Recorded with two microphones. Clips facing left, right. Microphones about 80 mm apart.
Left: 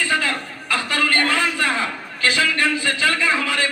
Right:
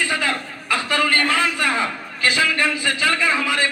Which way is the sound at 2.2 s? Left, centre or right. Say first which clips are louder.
Even; right.